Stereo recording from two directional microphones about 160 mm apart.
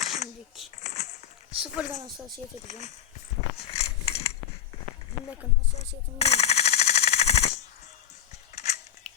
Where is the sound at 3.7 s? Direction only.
40° left (ahead or behind).